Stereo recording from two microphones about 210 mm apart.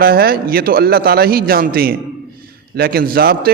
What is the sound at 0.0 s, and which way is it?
A man's voice, 45° right (ahead or behind).